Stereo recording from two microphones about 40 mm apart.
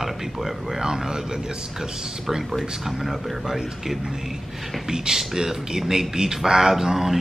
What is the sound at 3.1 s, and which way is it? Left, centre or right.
Speech, centre.